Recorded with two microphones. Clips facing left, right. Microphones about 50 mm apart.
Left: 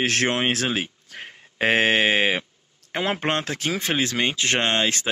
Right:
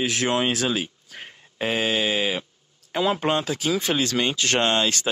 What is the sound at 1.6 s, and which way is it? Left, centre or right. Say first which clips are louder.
Speech: left 4 dB; left.